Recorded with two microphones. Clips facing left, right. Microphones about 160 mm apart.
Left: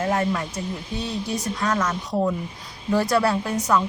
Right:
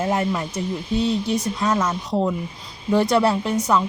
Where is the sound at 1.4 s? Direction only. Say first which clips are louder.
Right 2 dB; 25° right (ahead or behind).